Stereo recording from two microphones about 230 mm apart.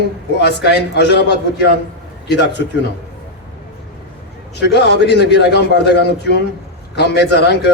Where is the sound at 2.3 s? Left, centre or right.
Left.